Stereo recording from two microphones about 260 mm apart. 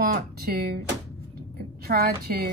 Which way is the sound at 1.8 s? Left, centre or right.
Right.